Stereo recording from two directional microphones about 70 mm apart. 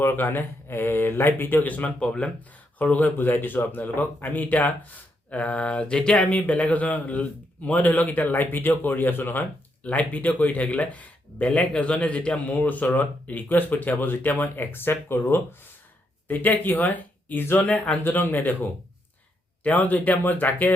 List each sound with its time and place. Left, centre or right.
0.0 s speech: left
19.6 s speech: left